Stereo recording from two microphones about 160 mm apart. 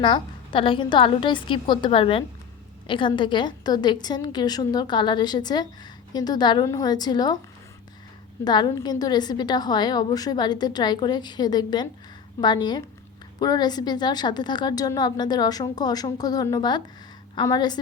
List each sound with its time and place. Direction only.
0.0 s a woman's voice: 30° left (ahead or behind)
8.4 s a woman's voice: 30° left (ahead or behind)